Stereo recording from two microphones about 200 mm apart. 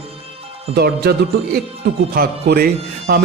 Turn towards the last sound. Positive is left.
turn(degrees=-50)  # may be behind; listen again after turning